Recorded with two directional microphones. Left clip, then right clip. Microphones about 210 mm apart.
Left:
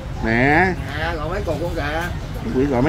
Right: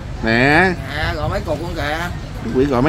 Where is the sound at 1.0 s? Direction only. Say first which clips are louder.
Right 2 dB; 55° right (ahead or behind).